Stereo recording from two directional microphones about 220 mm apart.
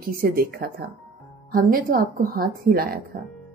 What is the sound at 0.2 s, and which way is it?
A woman's voice, 40° right (ahead or behind).